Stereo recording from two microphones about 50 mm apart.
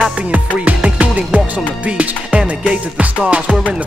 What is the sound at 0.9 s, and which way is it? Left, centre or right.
Music, right.